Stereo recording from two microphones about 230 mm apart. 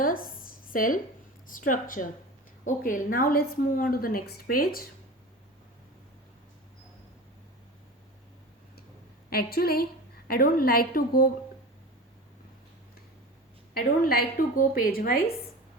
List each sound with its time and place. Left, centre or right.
0.0 s a sound: left
1.5 s a woman's voice: left
9.3 s a woman's voice: left
13.7 s a woman's voice: left